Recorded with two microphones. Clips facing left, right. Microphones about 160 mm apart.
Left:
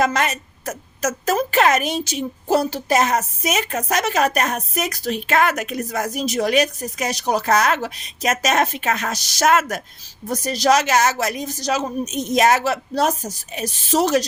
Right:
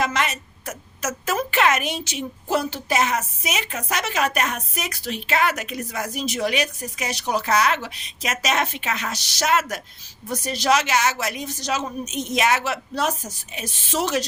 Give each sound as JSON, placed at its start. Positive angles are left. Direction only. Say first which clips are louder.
{"t": 0.0, "sound": "a woman's voice", "louder": "left 4 dB", "side_deg": 45}